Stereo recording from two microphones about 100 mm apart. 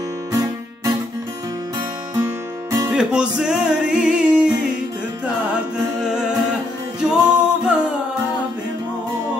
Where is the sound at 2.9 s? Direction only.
10° right (ahead or behind).